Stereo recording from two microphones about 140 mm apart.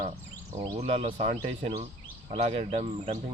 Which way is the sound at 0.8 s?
45° right (ahead or behind).